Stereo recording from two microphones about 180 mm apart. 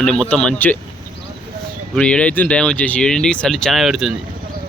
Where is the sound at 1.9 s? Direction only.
5° left (ahead or behind).